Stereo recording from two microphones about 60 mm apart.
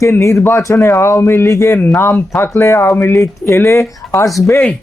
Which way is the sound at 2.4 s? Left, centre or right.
Left.